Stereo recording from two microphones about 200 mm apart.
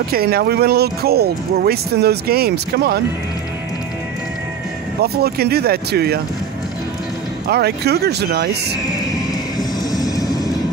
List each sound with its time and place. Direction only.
0.1 s speech: 50° right (ahead or behind)
5.0 s speech: 50° right (ahead or behind)
7.4 s speech: 55° right (ahead or behind)
9.6 s music: 20° left (ahead or behind)